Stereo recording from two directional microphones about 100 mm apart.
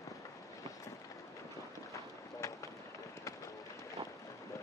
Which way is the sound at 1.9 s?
35° left (ahead or behind).